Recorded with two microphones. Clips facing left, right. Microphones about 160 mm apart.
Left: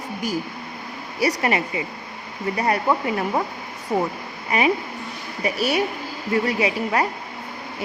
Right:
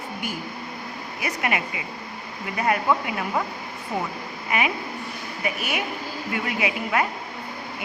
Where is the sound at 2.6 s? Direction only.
35° left (ahead or behind).